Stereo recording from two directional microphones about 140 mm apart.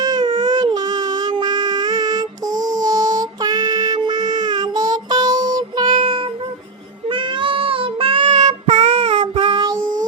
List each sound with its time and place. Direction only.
0.0 s baby cry: 30° right (ahead or behind)
7.1 s child singing: 40° right (ahead or behind)
8.3 s child singing: 55° right (ahead or behind); by 9.7 s 30° right (ahead or behind)